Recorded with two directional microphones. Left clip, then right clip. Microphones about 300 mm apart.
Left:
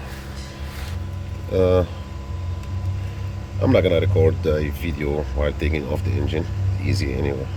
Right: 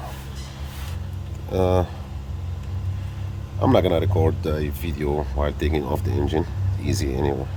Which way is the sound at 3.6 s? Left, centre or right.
Centre.